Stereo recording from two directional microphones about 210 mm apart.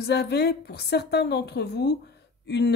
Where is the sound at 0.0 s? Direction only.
50° left (ahead or behind).